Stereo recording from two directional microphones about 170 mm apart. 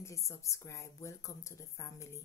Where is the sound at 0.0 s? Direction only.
15° left (ahead or behind).